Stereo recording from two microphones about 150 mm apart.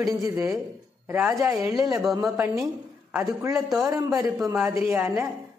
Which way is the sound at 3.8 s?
15° right (ahead or behind).